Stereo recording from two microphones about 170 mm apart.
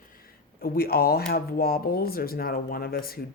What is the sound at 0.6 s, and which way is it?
Speech, 60° left (ahead or behind).